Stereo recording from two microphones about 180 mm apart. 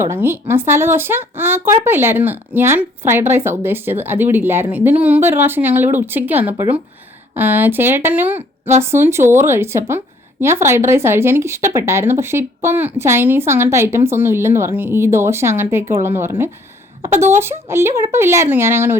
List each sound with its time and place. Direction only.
0.0 s speech: 15° right (ahead or behind)